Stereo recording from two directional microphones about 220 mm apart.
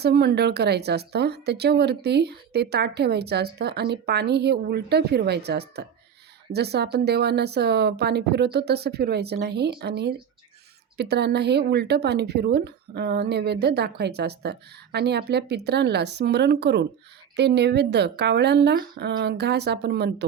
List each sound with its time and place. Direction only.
0.0 s speech: 45° right (ahead or behind)